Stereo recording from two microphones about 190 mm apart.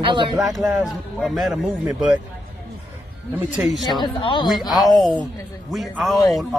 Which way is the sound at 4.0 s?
25° left (ahead or behind).